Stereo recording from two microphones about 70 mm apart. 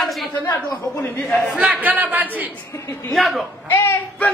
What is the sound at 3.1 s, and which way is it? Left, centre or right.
Speech, centre.